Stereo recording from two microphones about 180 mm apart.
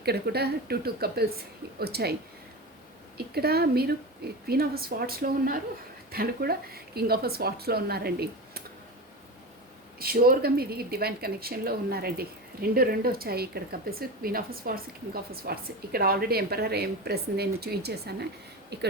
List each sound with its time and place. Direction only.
0.0 s a woman's voice: 60° right (ahead or behind)
3.2 s a woman's voice: 60° right (ahead or behind)
10.0 s a woman's voice: 55° right (ahead or behind)